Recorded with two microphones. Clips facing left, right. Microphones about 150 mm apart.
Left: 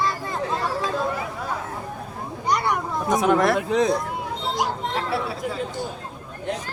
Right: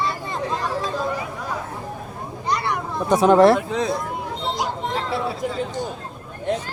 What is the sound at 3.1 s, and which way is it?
Speech, 30° right (ahead or behind).